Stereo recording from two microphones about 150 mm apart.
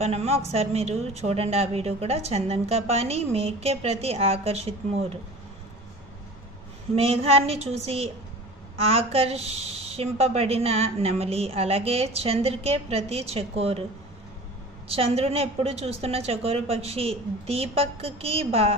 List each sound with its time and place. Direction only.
0.0 s a woman's voice: 45° right (ahead or behind)
7.0 s a woman's voice: 40° right (ahead or behind)
14.9 s a woman's voice: 40° right (ahead or behind)